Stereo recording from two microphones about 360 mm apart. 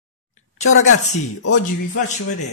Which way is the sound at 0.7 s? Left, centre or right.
Left.